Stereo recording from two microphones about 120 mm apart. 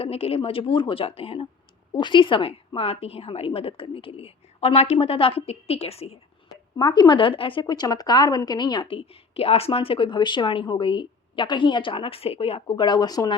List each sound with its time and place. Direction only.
0.0 s a woman's voice: 55° left (ahead or behind)
1.9 s a woman's voice: 40° left (ahead or behind); by 6.1 s 60° left (ahead or behind)
6.7 s speech: 35° left (ahead or behind)